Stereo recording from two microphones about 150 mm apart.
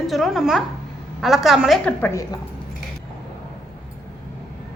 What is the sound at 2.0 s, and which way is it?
Speech, 20° left (ahead or behind).